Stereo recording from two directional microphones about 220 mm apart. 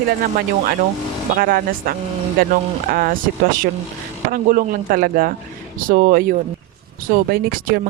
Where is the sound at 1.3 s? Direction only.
40° right (ahead or behind).